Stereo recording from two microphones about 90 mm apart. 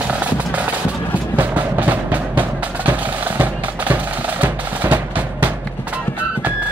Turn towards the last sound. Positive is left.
turn(degrees=-20)  # may be behind; listen again after turning